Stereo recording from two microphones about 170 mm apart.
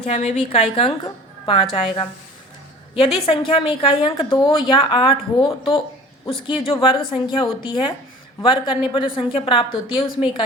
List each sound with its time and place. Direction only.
0.0 s a woman's voice: 40° left (ahead or behind)